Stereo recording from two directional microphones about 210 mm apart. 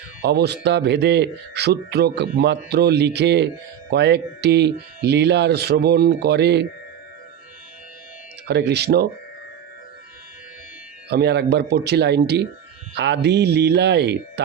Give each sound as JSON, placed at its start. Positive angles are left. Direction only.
{"t": 0.2, "sound": "speech", "side_deg": -50}
{"t": 8.4, "sound": "speech", "side_deg": -50}
{"t": 11.1, "sound": "speech", "side_deg": -50}